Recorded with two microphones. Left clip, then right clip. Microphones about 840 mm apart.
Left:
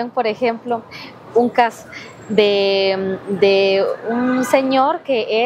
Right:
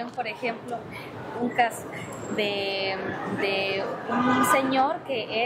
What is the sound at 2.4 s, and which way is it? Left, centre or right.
A woman's voice, left.